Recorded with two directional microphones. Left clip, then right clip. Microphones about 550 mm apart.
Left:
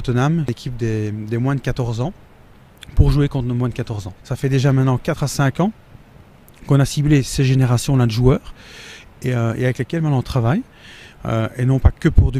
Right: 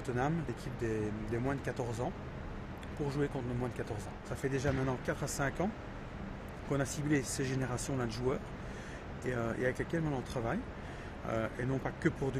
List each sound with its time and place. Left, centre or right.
0.0 s speech: left
6.7 s speech: left